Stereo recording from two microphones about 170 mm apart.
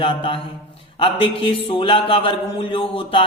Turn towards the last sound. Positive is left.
turn(degrees=30)  # may be behind; listen again after turning